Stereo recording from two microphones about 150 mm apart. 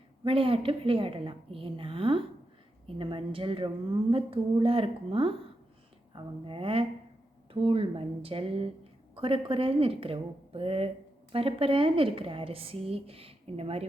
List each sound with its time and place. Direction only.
0.3 s a woman's voice: 35° right (ahead or behind)